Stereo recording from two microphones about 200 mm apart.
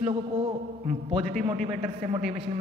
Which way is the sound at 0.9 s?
30° right (ahead or behind).